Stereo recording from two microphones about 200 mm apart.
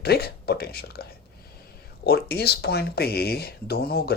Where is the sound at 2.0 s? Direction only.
50° left (ahead or behind).